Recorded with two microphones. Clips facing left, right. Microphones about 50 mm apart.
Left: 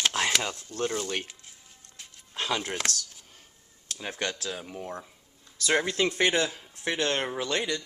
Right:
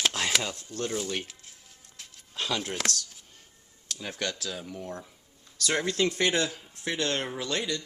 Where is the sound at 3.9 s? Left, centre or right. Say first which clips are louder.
Left 1 dB; centre.